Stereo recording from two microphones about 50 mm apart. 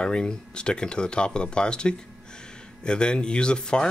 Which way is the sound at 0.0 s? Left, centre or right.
Centre.